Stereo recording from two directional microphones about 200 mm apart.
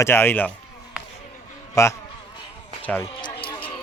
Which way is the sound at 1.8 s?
15° left (ahead or behind).